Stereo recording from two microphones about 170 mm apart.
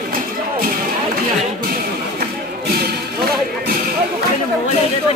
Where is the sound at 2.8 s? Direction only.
65° right (ahead or behind).